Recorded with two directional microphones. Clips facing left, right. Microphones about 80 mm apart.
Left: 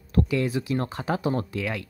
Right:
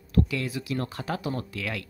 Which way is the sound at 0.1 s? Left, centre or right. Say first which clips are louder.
Left 3 dB; left.